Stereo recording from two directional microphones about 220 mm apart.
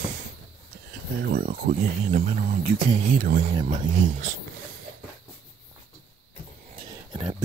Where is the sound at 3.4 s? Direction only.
30° right (ahead or behind).